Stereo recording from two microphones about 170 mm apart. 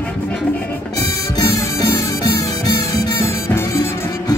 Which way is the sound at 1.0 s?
20° left (ahead or behind).